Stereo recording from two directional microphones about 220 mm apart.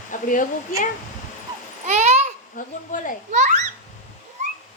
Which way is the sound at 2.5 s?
35° left (ahead or behind).